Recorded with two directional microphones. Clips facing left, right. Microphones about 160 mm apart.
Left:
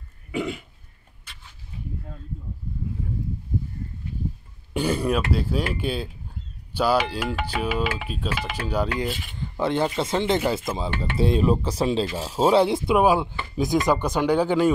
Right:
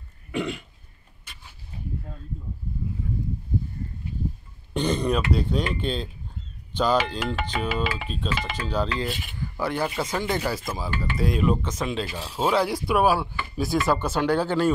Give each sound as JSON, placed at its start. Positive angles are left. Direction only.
{"t": 0.3, "sound": "throat clearing", "side_deg": 0}
{"t": 4.7, "sound": "throat clearing", "side_deg": 5}
{"t": 5.3, "sound": "speech", "side_deg": 5}
{"t": 9.4, "sound": "speech", "side_deg": 25}
{"t": 12.6, "sound": "speech", "side_deg": 25}